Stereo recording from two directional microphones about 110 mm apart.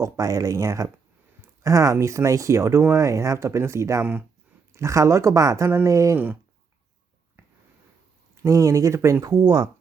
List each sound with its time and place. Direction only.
0.0 s speech: 30° right (ahead or behind)
8.4 s speech: 30° right (ahead or behind)